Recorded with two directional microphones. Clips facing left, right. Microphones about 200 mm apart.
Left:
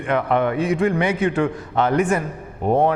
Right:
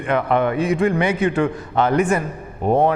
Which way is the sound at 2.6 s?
45° right (ahead or behind).